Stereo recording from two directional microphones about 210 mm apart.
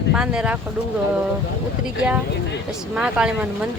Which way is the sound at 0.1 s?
5° right (ahead or behind).